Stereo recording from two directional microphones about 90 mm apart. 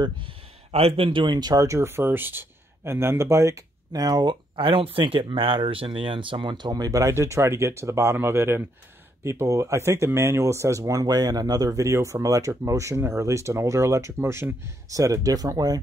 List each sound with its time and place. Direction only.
0.7 s speech: 90° right; by 4.4 s 50° right (ahead or behind)
4.6 s speech: 80° right; by 15.8 s 45° right (ahead or behind)